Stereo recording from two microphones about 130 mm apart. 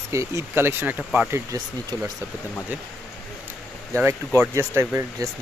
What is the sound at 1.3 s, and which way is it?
Speech, 30° right (ahead or behind).